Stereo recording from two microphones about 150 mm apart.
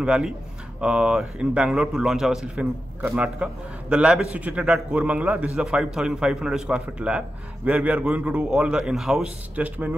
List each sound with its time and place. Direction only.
0.0 s a man's voice: 5° right (ahead or behind)